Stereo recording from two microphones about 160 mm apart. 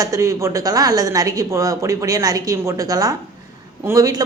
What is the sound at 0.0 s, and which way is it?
A woman's voice, 20° right (ahead or behind).